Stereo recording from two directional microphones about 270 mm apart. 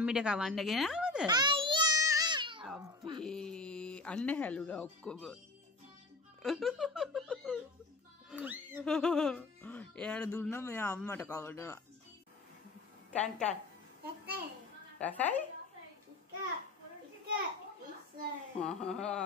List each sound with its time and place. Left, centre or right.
0.0 s speech: centre
1.2 s babbling: centre
2.8 s a sound: centre
3.3 s music: centre
5.0 s speech: centre
6.4 s a sound: centre
8.3 s speech: centre
13.1 s speech: centre
14.0 s a child's voice: right
15.0 s speech: centre
18.6 s speech: centre